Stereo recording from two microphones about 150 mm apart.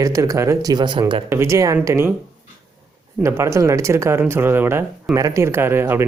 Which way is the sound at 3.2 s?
20° right (ahead or behind).